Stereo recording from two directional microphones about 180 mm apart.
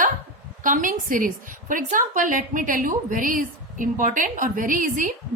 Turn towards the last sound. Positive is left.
turn(degrees=-50)  # may be behind; listen again after turning